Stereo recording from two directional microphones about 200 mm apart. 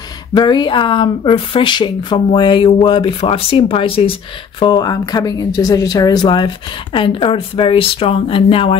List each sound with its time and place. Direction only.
0.3 s speech: 20° left (ahead or behind)